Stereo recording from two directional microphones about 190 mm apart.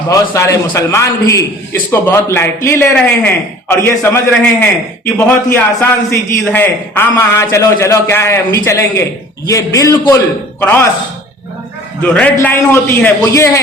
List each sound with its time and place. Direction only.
0.1 s a man's voice: 15° left (ahead or behind)
12.0 s a man's voice: 5° left (ahead or behind)